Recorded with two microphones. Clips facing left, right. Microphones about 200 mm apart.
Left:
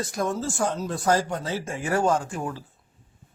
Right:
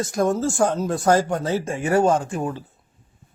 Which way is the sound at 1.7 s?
25° right (ahead or behind).